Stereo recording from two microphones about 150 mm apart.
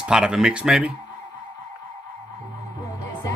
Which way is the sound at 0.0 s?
5° right (ahead or behind).